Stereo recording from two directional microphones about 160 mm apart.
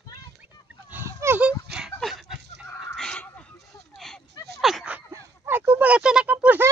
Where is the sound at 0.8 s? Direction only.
15° right (ahead or behind).